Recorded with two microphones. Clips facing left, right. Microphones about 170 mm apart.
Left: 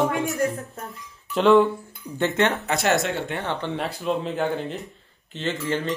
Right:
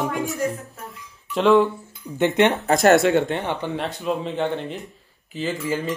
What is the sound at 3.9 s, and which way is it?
Speech, centre (ahead or behind).